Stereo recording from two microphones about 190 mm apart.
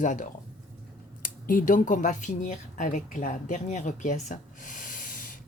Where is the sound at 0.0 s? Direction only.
40° left (ahead or behind).